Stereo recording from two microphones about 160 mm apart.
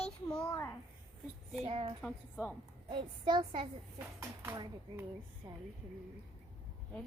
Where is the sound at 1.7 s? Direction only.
35° right (ahead or behind).